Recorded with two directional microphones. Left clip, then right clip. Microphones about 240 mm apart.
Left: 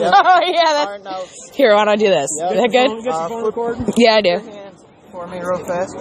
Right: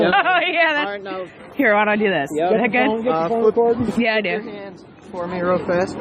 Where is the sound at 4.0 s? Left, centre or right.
Left.